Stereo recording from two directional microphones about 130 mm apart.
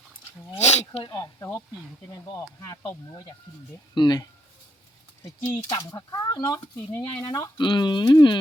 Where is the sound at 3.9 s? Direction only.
35° left (ahead or behind).